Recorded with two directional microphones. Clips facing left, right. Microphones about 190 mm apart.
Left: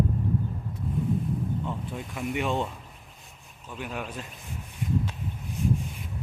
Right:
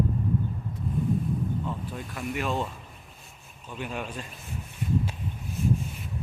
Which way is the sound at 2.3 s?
20° left (ahead or behind).